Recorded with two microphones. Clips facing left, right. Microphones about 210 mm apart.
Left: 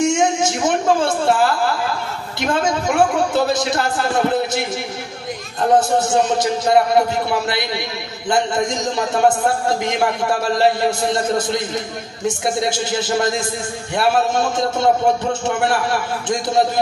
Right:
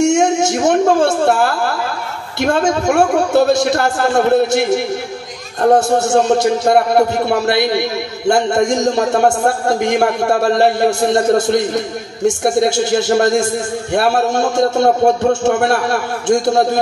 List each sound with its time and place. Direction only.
0.0 s a sound: 70° right (ahead or behind)
4.5 s a man's voice: 70° right (ahead or behind)
14.6 s a man's voice: 65° right (ahead or behind)